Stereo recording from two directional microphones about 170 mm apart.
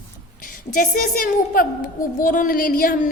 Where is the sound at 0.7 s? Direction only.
55° left (ahead or behind).